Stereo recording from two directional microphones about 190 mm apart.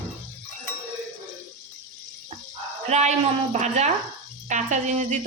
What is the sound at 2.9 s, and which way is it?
Speech, 35° right (ahead or behind).